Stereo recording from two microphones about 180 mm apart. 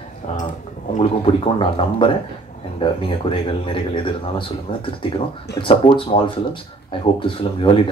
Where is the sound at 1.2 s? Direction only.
30° left (ahead or behind).